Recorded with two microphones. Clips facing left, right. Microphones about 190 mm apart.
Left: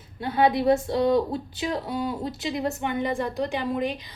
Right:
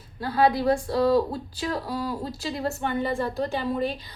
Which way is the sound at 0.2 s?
20° left (ahead or behind).